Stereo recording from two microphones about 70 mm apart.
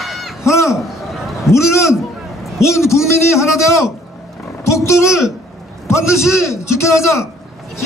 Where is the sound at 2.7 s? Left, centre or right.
Left.